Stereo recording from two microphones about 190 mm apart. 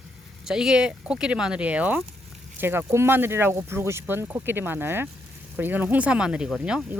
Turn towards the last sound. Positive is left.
turn(degrees=-5)  # may be behind; listen again after turning